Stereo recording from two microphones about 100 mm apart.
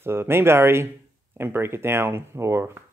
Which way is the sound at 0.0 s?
25° right (ahead or behind).